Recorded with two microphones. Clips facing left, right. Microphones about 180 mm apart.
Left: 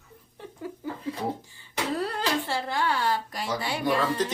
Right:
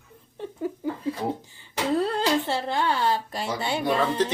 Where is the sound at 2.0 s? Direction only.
25° right (ahead or behind).